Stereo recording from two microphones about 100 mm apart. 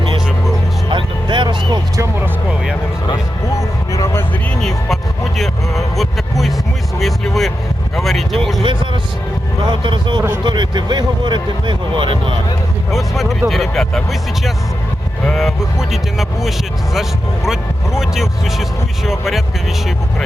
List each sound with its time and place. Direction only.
0.9 s music: 55° right (ahead or behind)
2.2 s a sound: 10° right (ahead or behind)
3.6 s vehicle: 35° left (ahead or behind)
5.4 s vehicle: centre (ahead or behind)
8.6 s music: 55° right (ahead or behind)
9.6 s vehicle: 50° right (ahead or behind)
10.4 s a sound: 50° right (ahead or behind)
12.9 s a sound: centre (ahead or behind)
13.5 s speech: centre (ahead or behind)